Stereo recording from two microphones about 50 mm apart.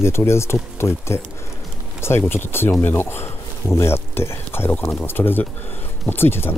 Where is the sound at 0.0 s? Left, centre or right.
Left.